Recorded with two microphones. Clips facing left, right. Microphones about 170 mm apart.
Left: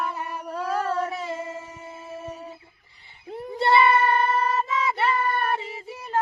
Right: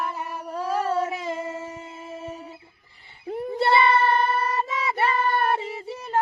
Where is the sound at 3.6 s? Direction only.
35° right (ahead or behind).